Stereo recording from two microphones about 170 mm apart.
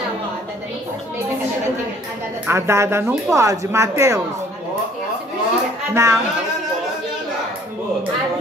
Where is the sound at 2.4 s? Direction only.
15° right (ahead or behind).